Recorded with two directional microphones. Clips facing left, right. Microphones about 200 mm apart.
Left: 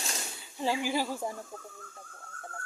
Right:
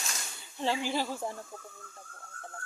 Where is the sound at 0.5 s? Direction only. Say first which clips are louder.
Left 1 dB; 10° left (ahead or behind).